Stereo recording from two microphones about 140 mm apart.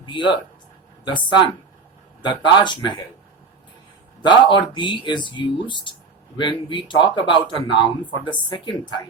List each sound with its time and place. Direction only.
0.0 s speech: 35° left (ahead or behind)
4.2 s speech: 35° left (ahead or behind)